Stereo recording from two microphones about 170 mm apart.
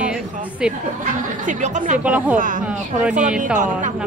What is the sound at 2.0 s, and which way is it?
Speech, 10° right (ahead or behind).